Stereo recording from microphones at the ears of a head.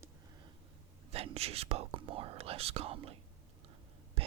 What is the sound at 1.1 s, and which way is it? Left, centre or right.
Whispering, right.